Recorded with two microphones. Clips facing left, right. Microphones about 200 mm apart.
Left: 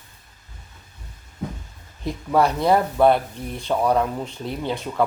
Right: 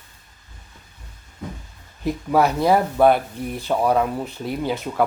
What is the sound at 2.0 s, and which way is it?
Speech, 5° right (ahead or behind).